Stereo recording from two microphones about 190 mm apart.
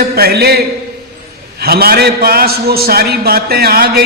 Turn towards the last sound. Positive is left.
turn(degrees=-55)  # may be behind; listen again after turning